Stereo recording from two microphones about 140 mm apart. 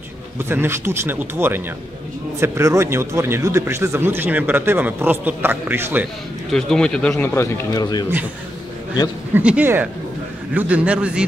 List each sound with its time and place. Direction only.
0.4 s speech: 15° right (ahead or behind)
6.5 s a man's voice: 5° left (ahead or behind)
7.8 s a man's voice: 30° left (ahead or behind)
9.3 s speech: 10° right (ahead or behind)